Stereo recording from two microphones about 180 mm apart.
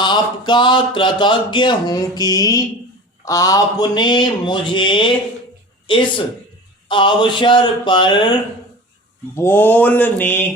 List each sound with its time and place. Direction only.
0.0 s speech: 25° left (ahead or behind)
6.8 s speech: 25° left (ahead or behind)
9.3 s mantra: 10° left (ahead or behind)